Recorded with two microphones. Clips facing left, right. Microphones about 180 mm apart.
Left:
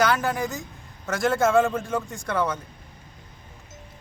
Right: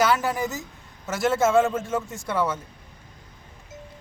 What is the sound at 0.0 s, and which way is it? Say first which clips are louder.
A man's voice: even; 5° right (ahead or behind).